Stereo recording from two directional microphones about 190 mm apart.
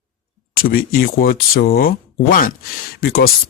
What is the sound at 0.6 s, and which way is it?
Speech, 50° left (ahead or behind).